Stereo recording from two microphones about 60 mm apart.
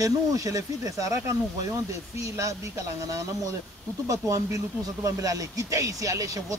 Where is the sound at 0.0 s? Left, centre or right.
Right.